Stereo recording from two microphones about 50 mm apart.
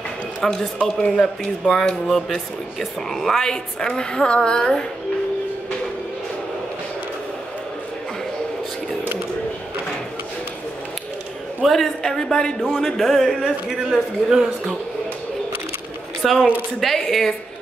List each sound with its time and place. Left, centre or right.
0.4 s speech: centre
11.6 s speech: centre
13.9 s speech: centre
16.2 s speech: centre